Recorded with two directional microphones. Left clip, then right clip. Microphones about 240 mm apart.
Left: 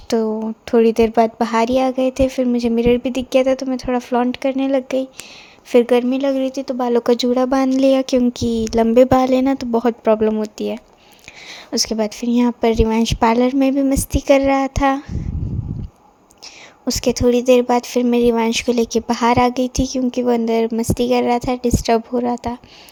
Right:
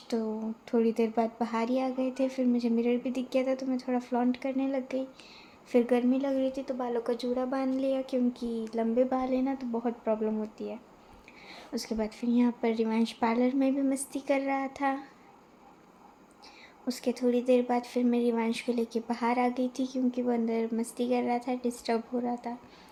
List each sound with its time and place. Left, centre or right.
0.1 s speech: left
16.8 s speech: left